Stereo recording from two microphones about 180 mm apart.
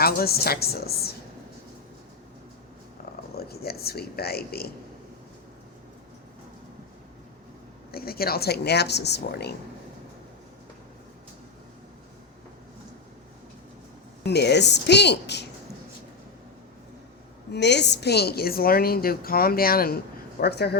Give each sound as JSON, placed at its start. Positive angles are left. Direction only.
{"t": 0.0, "sound": "a woman's voice", "side_deg": 60}
{"t": 3.3, "sound": "speech", "side_deg": 60}
{"t": 7.9, "sound": "a woman's voice", "side_deg": 60}
{"t": 14.3, "sound": "a woman's voice", "side_deg": 65}
{"t": 17.5, "sound": "a woman's voice", "side_deg": 70}